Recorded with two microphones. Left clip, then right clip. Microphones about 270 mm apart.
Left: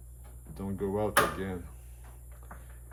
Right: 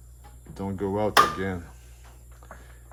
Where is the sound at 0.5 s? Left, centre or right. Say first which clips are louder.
Right 5 dB; right.